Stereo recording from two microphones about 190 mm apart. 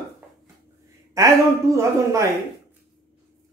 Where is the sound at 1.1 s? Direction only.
15° right (ahead or behind).